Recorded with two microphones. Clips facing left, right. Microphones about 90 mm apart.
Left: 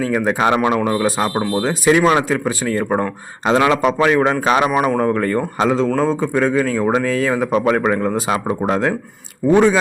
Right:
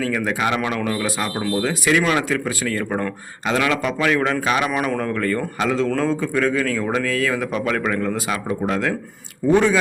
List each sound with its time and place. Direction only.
0.0 s speech: 30° left (ahead or behind)
4.7 s speech: 20° left (ahead or behind)
9.5 s speech: 15° left (ahead or behind)